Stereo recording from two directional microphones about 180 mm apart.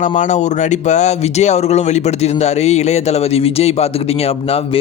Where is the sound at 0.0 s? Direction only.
45° left (ahead or behind).